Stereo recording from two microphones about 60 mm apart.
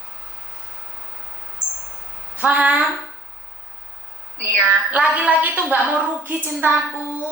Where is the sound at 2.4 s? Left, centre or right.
Right.